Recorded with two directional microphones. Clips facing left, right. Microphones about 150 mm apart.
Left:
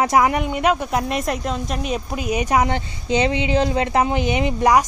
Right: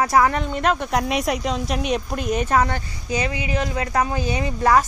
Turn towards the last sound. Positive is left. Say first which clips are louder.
# left 2 dB
turn(degrees=20)  # may be behind; listen again after turning